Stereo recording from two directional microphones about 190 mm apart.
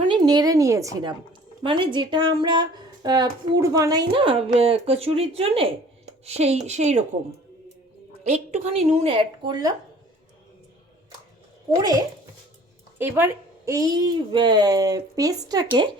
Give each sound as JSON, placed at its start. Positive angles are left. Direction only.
{"t": 0.0, "sound": "a woman's voice", "side_deg": -20}
{"t": 8.2, "sound": "a woman's voice", "side_deg": -35}
{"t": 9.5, "sound": "a woman's voice", "side_deg": -20}
{"t": 13.0, "sound": "a woman's voice", "side_deg": -10}